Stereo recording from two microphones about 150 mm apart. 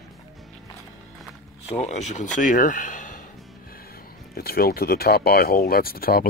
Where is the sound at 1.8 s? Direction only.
50° left (ahead or behind).